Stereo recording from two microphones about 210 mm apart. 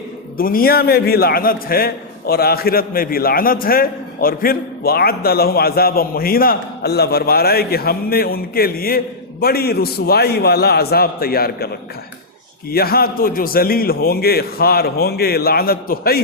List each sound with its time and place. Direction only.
0.3 s a man's voice: 45° left (ahead or behind)